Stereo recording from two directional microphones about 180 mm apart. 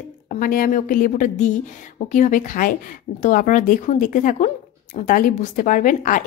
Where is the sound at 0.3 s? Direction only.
50° left (ahead or behind).